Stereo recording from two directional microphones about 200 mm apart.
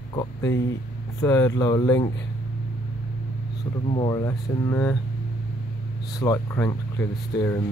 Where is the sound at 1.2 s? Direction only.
15° left (ahead or behind).